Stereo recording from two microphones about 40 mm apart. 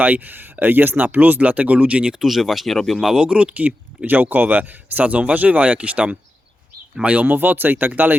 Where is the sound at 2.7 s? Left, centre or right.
Centre.